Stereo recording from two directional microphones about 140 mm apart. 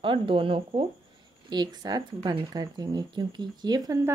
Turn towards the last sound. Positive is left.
turn(degrees=-25)  # may be behind; listen again after turning